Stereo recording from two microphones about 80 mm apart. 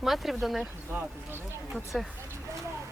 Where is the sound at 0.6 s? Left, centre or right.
Right.